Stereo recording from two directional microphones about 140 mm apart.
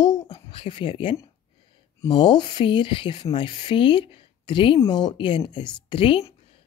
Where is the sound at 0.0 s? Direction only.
30° left (ahead or behind).